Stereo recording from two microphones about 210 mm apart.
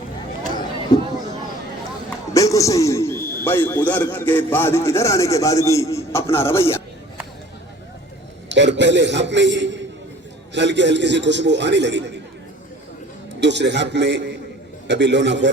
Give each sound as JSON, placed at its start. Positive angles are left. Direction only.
{"t": 2.3, "sound": "a man's voice", "side_deg": 15}
{"t": 8.4, "sound": "a man's voice", "side_deg": -60}
{"t": 13.4, "sound": "a man's voice", "side_deg": -55}